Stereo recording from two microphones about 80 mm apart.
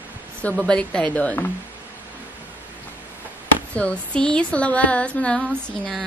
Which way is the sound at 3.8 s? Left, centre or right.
Centre.